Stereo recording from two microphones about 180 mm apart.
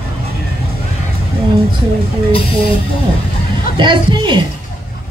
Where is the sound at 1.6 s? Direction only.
30° right (ahead or behind).